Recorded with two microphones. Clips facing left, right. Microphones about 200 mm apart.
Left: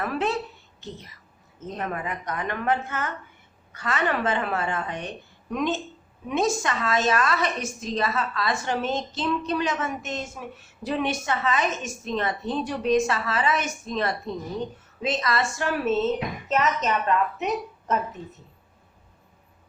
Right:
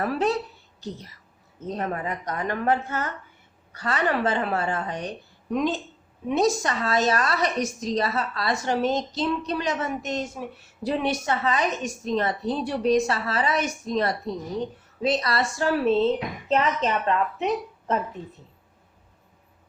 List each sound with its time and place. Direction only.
0.0 s a woman's voice: 35° right (ahead or behind)